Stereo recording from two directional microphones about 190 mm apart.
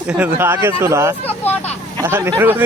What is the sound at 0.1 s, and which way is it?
Speech, 10° right (ahead or behind).